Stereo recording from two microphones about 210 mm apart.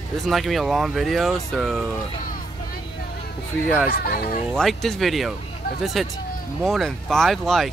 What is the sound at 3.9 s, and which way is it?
Speech, 45° left (ahead or behind).